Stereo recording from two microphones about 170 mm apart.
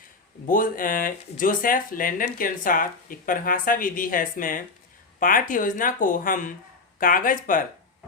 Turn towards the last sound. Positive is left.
turn(degrees=55)  # may be behind; listen again after turning